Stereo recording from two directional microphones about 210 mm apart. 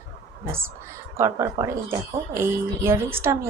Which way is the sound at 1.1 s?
15° right (ahead or behind).